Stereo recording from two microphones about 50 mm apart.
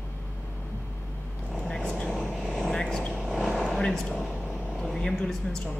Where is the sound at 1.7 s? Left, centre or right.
Centre.